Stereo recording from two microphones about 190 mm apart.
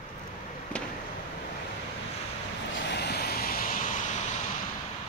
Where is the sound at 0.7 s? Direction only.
5° left (ahead or behind).